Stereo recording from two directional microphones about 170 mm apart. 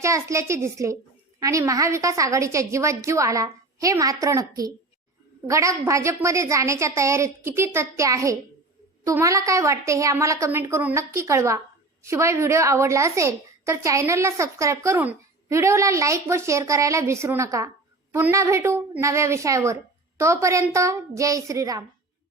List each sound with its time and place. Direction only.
0.0 s a woman's voice: 15° right (ahead or behind)